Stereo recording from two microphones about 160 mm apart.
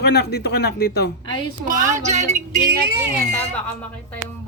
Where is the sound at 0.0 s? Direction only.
90° left.